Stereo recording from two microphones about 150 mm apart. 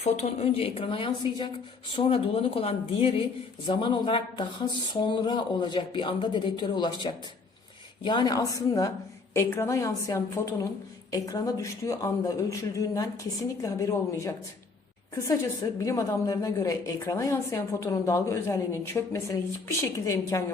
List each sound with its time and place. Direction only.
0.0 s a woman's voice: 45° left (ahead or behind); by 20.5 s 20° left (ahead or behind)